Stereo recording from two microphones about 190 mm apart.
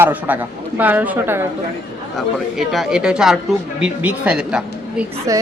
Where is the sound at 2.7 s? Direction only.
Centre (ahead or behind).